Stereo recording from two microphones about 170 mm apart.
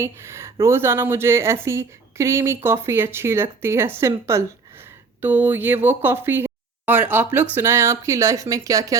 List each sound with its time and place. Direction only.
0.0 s a woman's voice: 15° right (ahead or behind)